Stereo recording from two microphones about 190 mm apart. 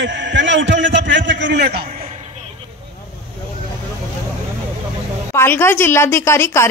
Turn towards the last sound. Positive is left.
turn(degrees=15)  # may be behind; listen again after turning